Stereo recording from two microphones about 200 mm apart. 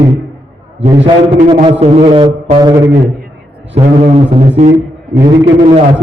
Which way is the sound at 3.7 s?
30° right (ahead or behind).